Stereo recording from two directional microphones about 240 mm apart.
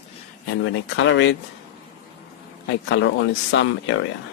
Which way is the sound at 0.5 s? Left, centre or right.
Left.